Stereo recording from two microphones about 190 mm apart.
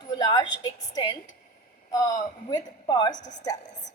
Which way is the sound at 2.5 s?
25° left (ahead or behind).